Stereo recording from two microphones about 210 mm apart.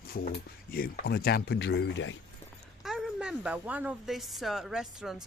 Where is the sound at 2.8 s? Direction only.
Centre (ahead or behind).